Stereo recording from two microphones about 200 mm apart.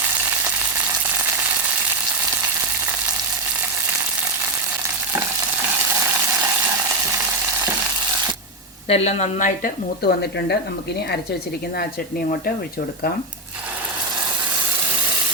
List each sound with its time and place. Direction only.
8.9 s a woman's voice: 35° left (ahead or behind); by 10.6 s 55° left (ahead or behind)